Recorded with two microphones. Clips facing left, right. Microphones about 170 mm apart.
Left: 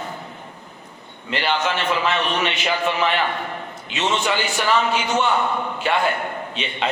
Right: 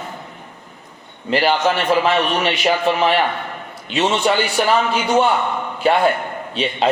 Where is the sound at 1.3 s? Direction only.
40° right (ahead or behind).